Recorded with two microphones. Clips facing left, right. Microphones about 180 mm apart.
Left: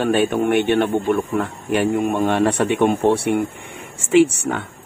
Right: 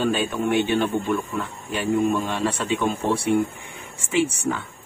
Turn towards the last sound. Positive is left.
turn(degrees=65)  # may be behind; listen again after turning